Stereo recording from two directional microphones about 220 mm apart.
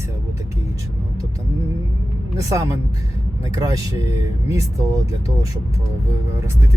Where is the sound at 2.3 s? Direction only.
15° right (ahead or behind).